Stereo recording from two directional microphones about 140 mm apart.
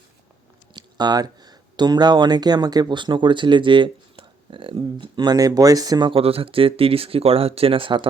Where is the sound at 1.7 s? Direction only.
30° right (ahead or behind).